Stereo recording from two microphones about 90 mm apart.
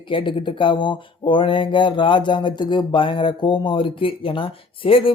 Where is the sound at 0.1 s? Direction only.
75° left (ahead or behind).